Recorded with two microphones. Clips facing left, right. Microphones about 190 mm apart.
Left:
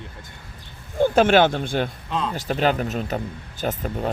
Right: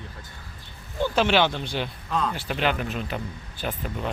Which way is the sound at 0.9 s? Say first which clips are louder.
Left 6 dB; 50° left (ahead or behind).